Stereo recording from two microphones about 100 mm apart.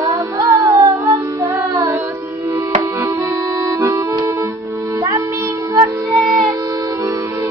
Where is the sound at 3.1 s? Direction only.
35° right (ahead or behind).